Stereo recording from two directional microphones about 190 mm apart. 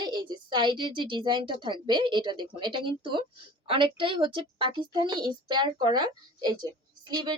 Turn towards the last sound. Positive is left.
turn(degrees=-20)  # may be behind; listen again after turning